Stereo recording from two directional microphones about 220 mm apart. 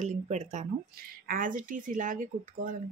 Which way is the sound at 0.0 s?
30° right (ahead or behind).